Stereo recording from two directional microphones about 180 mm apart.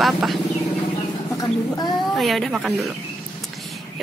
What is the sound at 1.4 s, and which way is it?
Speech, 20° left (ahead or behind).